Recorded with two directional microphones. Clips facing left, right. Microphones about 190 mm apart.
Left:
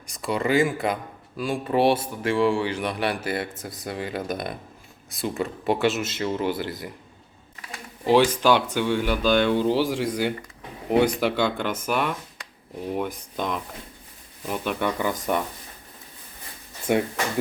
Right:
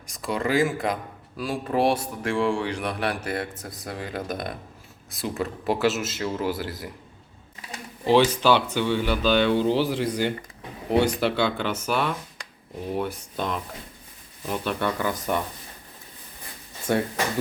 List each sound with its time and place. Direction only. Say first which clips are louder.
0.1 s speech: left 2 dB; centre (ahead or behind)
8.0 s speech: even; 10° left (ahead or behind)
14.4 s speech: even; 10° left (ahead or behind)
16.9 s speech: left 2 dB; 15° left (ahead or behind)